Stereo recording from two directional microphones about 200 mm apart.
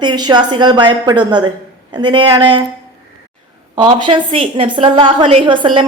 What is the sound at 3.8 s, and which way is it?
A woman's voice, 25° right (ahead or behind).